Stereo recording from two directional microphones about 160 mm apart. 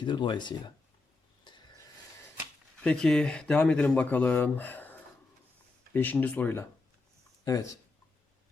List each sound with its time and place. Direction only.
0.0 s speech: 30° left (ahead or behind)
1.5 s a sound: 30° left (ahead or behind)
2.8 s speech: 5° left (ahead or behind); by 7.7 s 20° left (ahead or behind)